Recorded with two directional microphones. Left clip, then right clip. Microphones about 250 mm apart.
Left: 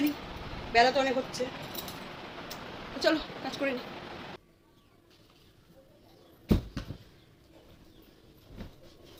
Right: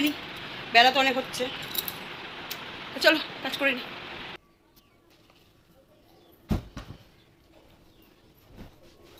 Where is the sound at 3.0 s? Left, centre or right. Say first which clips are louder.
Right 6 dB; centre.